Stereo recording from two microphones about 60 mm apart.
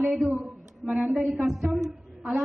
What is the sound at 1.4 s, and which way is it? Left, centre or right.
Speech, centre.